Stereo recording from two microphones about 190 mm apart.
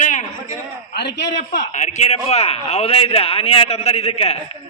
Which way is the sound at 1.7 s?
40° left (ahead or behind).